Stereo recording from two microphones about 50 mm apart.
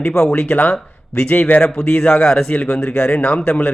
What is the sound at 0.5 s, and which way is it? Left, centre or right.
A man's voice, left.